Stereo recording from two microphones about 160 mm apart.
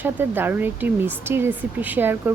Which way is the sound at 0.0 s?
10° right (ahead or behind).